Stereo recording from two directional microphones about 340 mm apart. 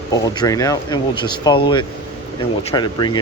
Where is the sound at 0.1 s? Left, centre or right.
Centre.